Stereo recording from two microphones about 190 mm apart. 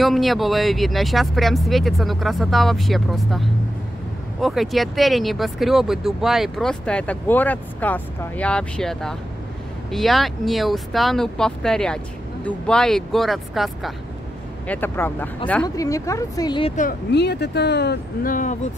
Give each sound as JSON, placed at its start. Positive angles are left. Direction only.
{"t": 0.0, "sound": "speech", "side_deg": 0}
{"t": 14.7, "sound": "speech", "side_deg": 10}
{"t": 17.1, "sound": "speech", "side_deg": 60}